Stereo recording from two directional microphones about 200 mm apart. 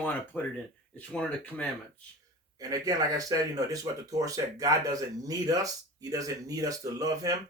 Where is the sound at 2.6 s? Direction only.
15° right (ahead or behind).